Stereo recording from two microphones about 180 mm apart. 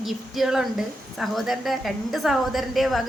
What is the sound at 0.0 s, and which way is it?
A woman's voice, centre (ahead or behind).